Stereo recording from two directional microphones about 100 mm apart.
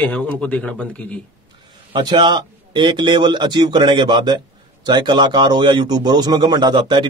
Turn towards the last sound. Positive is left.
turn(degrees=-50)  # may be behind; listen again after turning